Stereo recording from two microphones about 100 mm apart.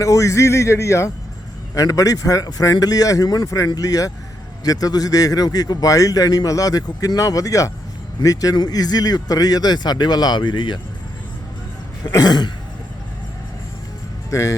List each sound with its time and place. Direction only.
0.0 s a man's voice: 30° left (ahead or behind); by 10.8 s 50° left (ahead or behind)
12.0 s cough: 40° left (ahead or behind)
14.3 s speech: 30° left (ahead or behind)